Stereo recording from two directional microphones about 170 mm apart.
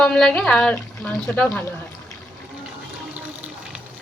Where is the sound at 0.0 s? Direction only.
5° left (ahead or behind).